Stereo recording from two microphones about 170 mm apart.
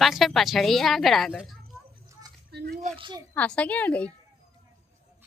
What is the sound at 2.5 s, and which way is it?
Speech, 75° right (ahead or behind).